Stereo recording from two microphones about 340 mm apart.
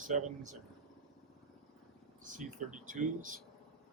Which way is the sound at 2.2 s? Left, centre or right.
Right.